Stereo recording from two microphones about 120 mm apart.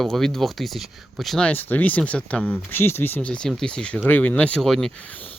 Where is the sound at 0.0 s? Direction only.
5° left (ahead or behind).